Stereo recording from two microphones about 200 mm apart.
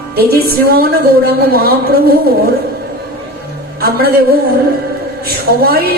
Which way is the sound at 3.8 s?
50° right (ahead or behind).